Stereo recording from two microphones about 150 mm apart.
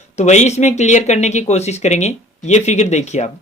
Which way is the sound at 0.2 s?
50° left (ahead or behind).